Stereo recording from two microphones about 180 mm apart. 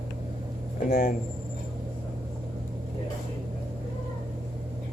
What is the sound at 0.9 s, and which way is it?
Speech, 50° left (ahead or behind).